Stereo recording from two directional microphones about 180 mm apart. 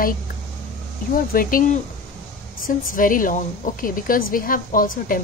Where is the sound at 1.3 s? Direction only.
50° left (ahead or behind).